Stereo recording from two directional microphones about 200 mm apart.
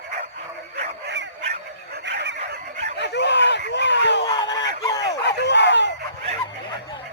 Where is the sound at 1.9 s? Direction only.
55° right (ahead or behind).